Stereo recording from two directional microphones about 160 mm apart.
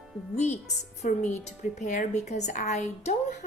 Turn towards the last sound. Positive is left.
turn(degrees=45)  # may be behind; listen again after turning